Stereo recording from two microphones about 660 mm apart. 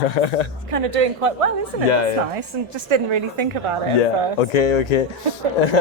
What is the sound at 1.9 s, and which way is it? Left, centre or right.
Speech, left.